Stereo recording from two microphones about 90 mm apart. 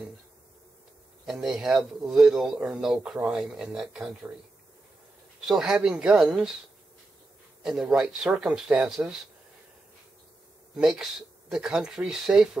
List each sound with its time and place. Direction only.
1.2 s speech: 5° right (ahead or behind)
5.4 s speech: 5° right (ahead or behind)
7.6 s speech: 10° right (ahead or behind)
10.8 s speech: 5° right (ahead or behind)